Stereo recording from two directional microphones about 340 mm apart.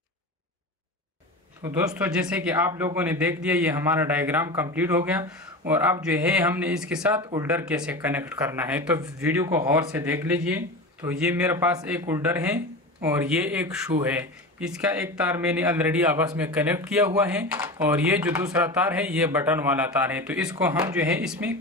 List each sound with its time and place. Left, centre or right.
1.6 s speech: centre